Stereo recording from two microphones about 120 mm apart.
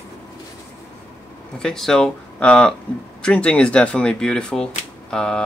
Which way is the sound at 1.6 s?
5° left (ahead or behind).